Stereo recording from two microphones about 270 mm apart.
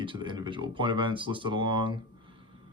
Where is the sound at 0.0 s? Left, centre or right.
Centre.